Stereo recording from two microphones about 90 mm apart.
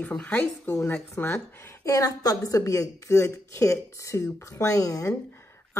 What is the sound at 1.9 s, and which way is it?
A woman's voice, 40° left (ahead or behind).